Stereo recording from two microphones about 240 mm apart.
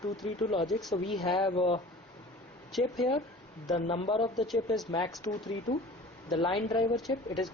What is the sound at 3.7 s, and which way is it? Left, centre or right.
Speech, left.